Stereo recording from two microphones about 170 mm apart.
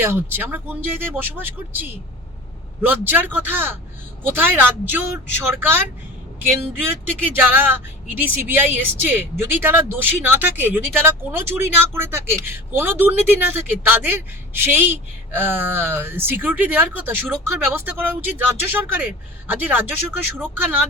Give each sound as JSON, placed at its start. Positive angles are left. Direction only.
{"t": 0.0, "sound": "speech", "side_deg": -15}
{"t": 3.0, "sound": "speech", "side_deg": -10}
{"t": 6.8, "sound": "speech", "side_deg": -10}